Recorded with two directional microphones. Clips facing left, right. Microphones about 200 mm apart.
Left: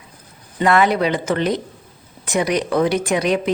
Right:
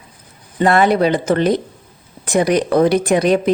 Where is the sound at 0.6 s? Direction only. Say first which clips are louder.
Right 3 dB; 35° right (ahead or behind).